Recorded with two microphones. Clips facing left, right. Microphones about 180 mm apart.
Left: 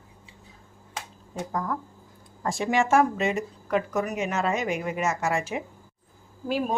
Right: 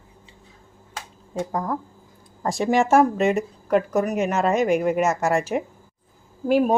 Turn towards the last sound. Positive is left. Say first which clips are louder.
# right 8 dB
turn(degrees=-50)  # may be behind; listen again after turning